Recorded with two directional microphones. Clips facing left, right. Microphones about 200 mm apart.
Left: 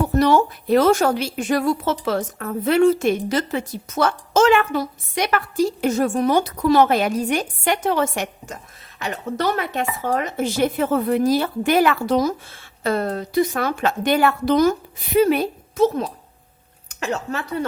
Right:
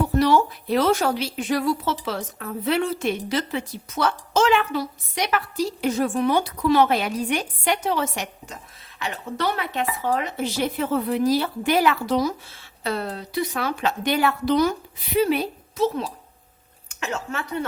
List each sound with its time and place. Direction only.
0.2 s a woman's voice: 45° left (ahead or behind)
16.9 s a woman's voice: 35° left (ahead or behind)